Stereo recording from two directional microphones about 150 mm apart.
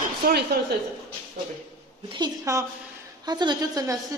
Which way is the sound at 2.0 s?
30° right (ahead or behind).